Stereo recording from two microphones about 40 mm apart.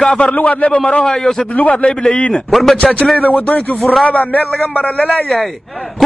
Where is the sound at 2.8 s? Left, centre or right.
Centre.